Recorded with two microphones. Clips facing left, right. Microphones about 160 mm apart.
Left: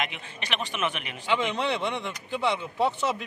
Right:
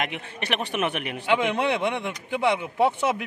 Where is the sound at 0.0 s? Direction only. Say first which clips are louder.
Right 3 dB; 55° right (ahead or behind).